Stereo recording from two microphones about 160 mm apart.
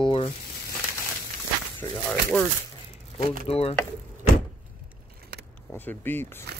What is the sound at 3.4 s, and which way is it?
Speech, 40° left (ahead or behind).